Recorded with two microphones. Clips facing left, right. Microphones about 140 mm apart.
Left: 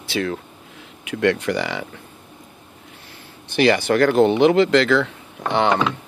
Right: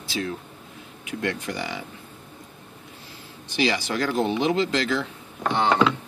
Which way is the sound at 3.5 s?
60° left (ahead or behind).